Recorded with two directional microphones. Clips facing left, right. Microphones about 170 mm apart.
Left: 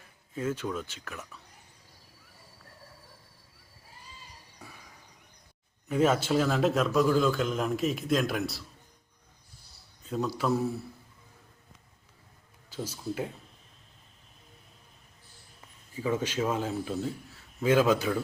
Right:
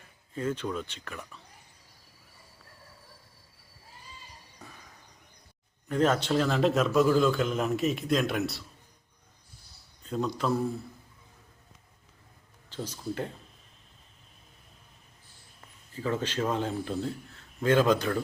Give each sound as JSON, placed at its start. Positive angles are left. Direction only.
{"t": 0.3, "sound": "a man's voice", "side_deg": 5}
{"t": 4.6, "sound": "a sound", "side_deg": 10}
{"t": 5.9, "sound": "a man's voice", "side_deg": 5}
{"t": 10.1, "sound": "a man's voice", "side_deg": 5}
{"t": 12.7, "sound": "speech", "side_deg": 10}
{"t": 15.9, "sound": "a man's voice", "side_deg": 10}